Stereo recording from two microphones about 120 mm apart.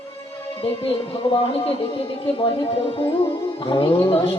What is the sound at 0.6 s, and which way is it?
Mantra, 50° left (ahead or behind).